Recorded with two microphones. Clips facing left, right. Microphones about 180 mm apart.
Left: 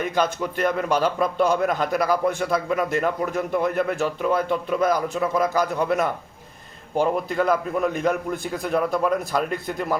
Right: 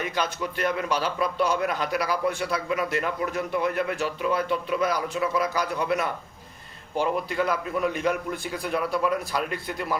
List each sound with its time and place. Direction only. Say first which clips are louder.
0.0 s a man's voice: left 5 dB; 50° left (ahead or behind)